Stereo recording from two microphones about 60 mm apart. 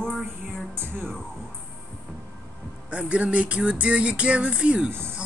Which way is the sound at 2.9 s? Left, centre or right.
Right.